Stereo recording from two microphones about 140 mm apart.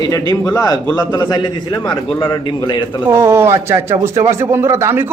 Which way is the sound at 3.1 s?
20° right (ahead or behind).